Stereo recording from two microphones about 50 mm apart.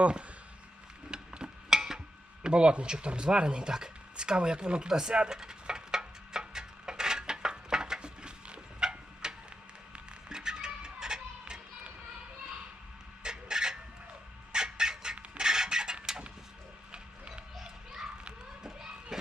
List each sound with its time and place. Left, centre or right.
0.0 s speech: right
1.1 s tick-tock: centre
2.4 s a sound: right
9.9 s music: centre
13.2 s a sound: centre
16.9 s children playing: centre